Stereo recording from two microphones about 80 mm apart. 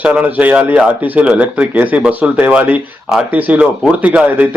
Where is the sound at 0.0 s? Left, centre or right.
Centre.